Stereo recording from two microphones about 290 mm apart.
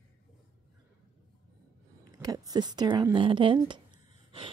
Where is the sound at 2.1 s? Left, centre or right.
Centre.